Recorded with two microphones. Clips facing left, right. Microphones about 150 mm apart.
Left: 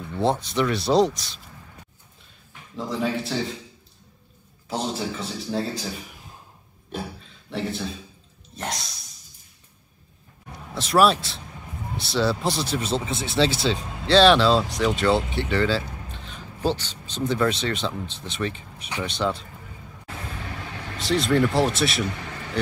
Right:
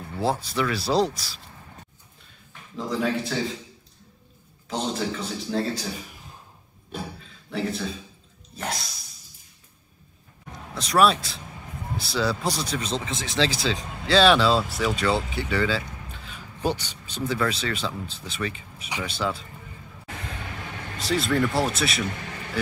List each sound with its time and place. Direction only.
0.1 s speech: 5° right (ahead or behind)
2.7 s speech: centre (ahead or behind)
4.6 s speech: 5° left (ahead or behind)
6.9 s a sound: centre (ahead or behind)
10.7 s speech: centre (ahead or behind)
21.0 s speech: centre (ahead or behind)
22.1 s vehicle: 55° right (ahead or behind)